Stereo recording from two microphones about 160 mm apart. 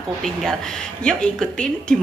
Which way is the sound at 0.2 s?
Centre (ahead or behind).